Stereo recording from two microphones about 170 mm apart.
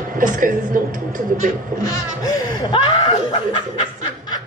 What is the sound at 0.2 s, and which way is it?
Speech, 50° right (ahead or behind).